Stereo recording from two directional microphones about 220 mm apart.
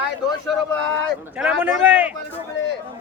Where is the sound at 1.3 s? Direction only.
5° right (ahead or behind).